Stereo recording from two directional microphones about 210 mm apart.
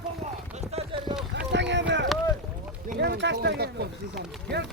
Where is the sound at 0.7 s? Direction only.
30° right (ahead or behind).